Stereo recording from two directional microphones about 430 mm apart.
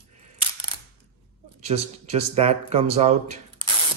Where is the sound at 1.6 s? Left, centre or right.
Centre.